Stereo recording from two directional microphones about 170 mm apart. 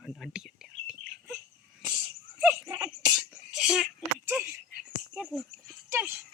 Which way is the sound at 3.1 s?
5° right (ahead or behind).